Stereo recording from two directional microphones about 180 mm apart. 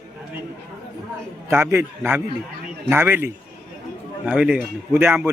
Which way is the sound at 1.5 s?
15° right (ahead or behind).